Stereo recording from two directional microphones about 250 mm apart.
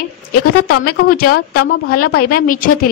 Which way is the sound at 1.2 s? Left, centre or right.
Left.